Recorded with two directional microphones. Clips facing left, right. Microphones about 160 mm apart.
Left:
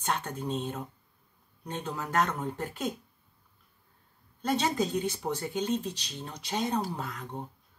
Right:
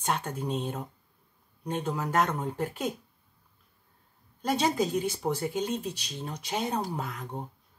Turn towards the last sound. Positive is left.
turn(degrees=-10)  # may be behind; listen again after turning